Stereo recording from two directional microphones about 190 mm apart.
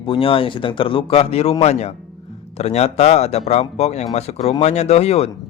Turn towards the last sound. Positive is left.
turn(degrees=30)  # may be behind; listen again after turning